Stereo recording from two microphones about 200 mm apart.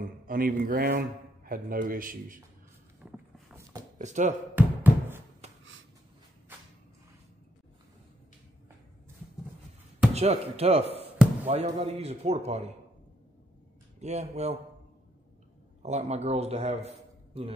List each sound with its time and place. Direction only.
0.0 s speech: 45° right (ahead or behind)
3.0 s vehicle: 5° right (ahead or behind)
4.0 s a man's voice: 35° right (ahead or behind)
4.6 s a sound: 10° right (ahead or behind)
10.1 s a man's voice: 30° right (ahead or behind)
13.9 s a man's voice: 35° right (ahead or behind)
15.8 s a man's voice: 35° right (ahead or behind)